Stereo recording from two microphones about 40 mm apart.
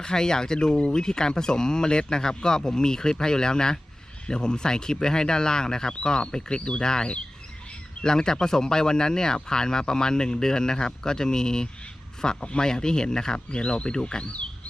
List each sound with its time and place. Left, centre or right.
0.0 s speech: centre